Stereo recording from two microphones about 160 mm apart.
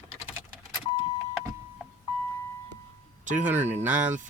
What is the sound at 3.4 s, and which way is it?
Speech, 10° right (ahead or behind).